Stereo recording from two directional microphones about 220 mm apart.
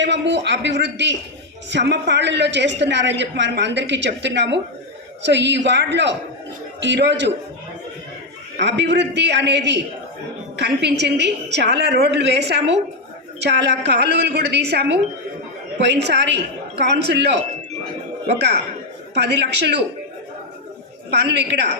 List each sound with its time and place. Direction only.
0.0 s a woman's voice: 50° right (ahead or behind)
8.5 s a woman's voice: 50° right (ahead or behind)
19.1 s a woman's voice: 50° right (ahead or behind)
21.1 s a woman's voice: 50° right (ahead or behind)